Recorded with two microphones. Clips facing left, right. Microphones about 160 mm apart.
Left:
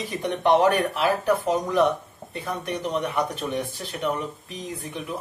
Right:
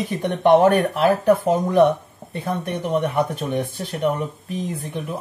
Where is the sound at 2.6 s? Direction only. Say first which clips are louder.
Right 4 dB; 50° right (ahead or behind).